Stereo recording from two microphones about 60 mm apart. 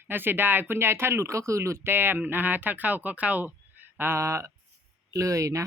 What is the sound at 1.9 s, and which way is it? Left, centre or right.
Speech, right.